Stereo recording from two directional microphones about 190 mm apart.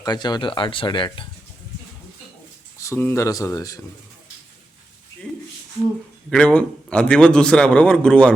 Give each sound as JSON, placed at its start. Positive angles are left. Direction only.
{"t": 0.0, "sound": "speech", "side_deg": 20}
{"t": 2.7, "sound": "speech", "side_deg": 15}
{"t": 6.3, "sound": "a man's voice", "side_deg": 5}